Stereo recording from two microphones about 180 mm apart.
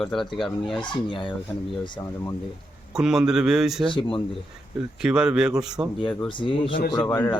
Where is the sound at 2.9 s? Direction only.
5° right (ahead or behind).